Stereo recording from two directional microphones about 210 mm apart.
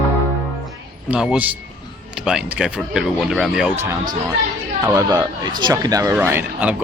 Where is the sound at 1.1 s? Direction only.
5° right (ahead or behind).